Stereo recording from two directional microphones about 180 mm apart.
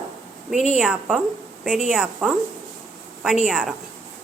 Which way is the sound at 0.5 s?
40° left (ahead or behind).